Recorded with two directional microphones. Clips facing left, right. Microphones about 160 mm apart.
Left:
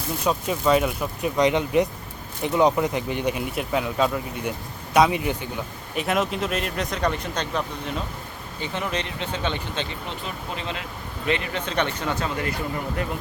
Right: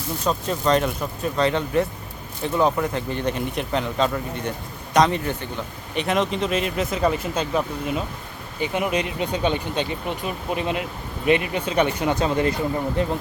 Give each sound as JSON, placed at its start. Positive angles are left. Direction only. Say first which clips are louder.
{"t": 0.3, "sound": "speech", "louder": "even", "side_deg": 10}
{"t": 12.2, "sound": "speech", "louder": "right 7 dB", "side_deg": -25}